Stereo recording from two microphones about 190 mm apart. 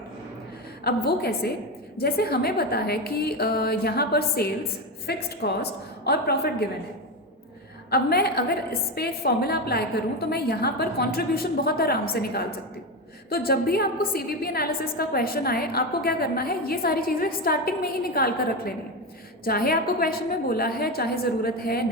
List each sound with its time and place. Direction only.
0.9 s a woman's voice: 55° left (ahead or behind)
7.9 s a woman's voice: 55° left (ahead or behind)